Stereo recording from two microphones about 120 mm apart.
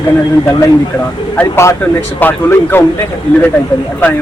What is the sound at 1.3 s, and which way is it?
Speech, 20° left (ahead or behind).